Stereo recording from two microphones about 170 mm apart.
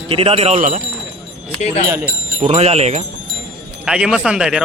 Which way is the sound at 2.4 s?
40° right (ahead or behind).